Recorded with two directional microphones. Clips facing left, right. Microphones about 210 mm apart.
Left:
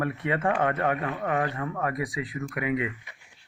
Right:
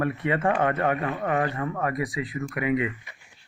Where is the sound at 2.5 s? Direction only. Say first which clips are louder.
Right 3 dB; 40° right (ahead or behind).